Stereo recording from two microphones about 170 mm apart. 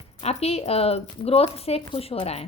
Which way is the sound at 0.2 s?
40° left (ahead or behind).